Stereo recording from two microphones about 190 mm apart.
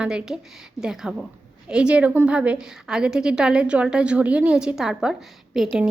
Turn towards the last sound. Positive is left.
turn(degrees=-5)  # may be behind; listen again after turning